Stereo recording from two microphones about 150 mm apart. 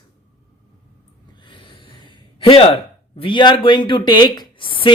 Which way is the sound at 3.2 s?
35° left (ahead or behind).